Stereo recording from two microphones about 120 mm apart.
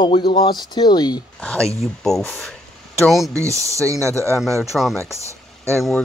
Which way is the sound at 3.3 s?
25° right (ahead or behind).